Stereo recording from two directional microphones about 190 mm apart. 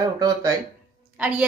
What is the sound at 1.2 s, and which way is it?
Speech, 5° right (ahead or behind).